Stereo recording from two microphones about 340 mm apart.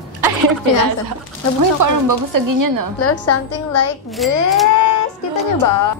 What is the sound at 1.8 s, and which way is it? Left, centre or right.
A woman's voice, right.